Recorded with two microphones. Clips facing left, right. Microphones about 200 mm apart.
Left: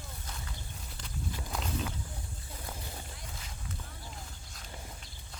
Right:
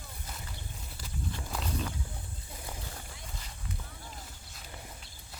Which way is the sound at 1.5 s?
Centre (ahead or behind).